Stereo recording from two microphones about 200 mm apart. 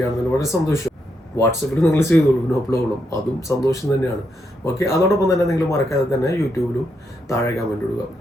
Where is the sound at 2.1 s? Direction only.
10° left (ahead or behind).